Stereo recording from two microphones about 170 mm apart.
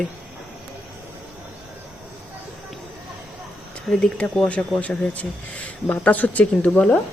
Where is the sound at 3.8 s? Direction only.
5° left (ahead or behind).